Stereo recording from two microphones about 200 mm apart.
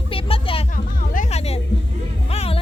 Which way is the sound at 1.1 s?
30° left (ahead or behind).